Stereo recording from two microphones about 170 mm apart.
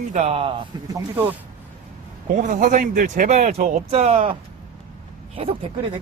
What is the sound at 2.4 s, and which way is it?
Speech, 50° right (ahead or behind).